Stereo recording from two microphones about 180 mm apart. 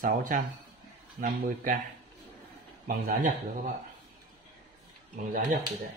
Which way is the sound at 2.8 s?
50° right (ahead or behind).